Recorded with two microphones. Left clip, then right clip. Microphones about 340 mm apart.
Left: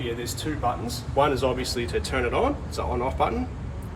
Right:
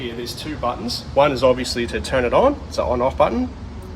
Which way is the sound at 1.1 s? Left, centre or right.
Right.